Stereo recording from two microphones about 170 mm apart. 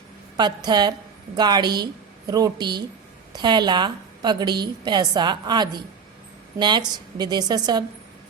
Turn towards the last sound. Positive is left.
turn(degrees=-25)  # may be behind; listen again after turning